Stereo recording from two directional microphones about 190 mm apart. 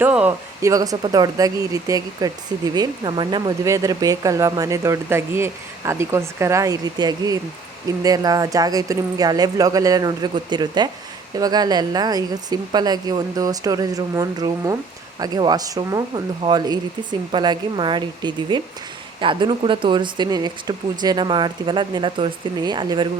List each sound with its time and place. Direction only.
0.0 s speech: 10° right (ahead or behind)